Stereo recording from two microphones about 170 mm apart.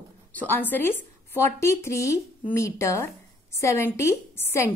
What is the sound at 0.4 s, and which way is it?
Speech, 10° left (ahead or behind).